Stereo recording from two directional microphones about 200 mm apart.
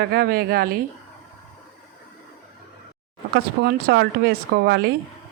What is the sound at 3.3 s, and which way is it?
Speech, 50° right (ahead or behind).